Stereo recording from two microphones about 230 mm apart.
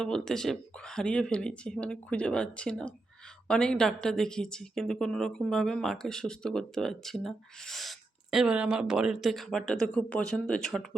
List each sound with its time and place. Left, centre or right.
0.0 s a woman's voice: centre